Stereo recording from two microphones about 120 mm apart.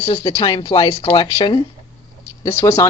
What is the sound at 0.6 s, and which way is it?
Speech, 40° left (ahead or behind).